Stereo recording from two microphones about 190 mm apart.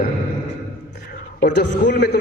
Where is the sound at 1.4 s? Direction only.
65° left (ahead or behind).